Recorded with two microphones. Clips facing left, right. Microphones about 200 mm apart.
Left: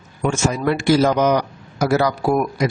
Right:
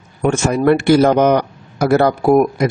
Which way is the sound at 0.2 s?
55° right (ahead or behind).